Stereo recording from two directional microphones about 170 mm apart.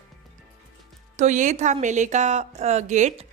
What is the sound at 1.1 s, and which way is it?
A woman's voice, 45° right (ahead or behind).